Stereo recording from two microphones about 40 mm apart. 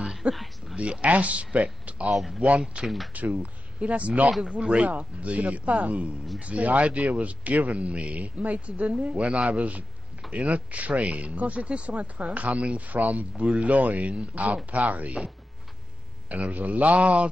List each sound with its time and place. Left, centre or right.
0.3 s a sound: centre
0.7 s a man's voice: right
2.0 s speech: centre
2.8 s a man's voice: right
3.1 s a man's voice: right
16.3 s a man's voice: right